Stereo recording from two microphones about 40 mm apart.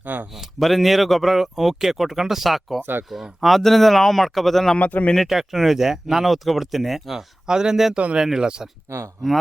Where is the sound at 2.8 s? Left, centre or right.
Right.